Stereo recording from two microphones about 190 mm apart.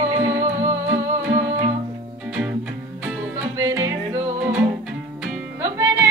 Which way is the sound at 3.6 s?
15° right (ahead or behind).